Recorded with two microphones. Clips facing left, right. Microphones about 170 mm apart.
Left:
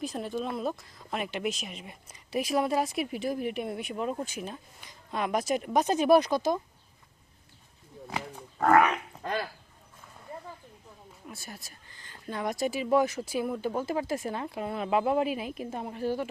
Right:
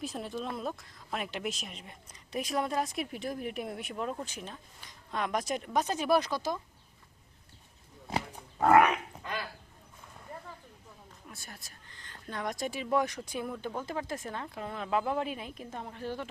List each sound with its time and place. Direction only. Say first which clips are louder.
0.0 s speech: left 4 dB; centre (ahead or behind); by 6.6 s 20° left (ahead or behind)
8.5 s roaring cats: even; 10° right (ahead or behind)
9.2 s speech: left 10 dB; 40° left (ahead or behind)
11.3 s speech: left 6 dB; 5° left (ahead or behind)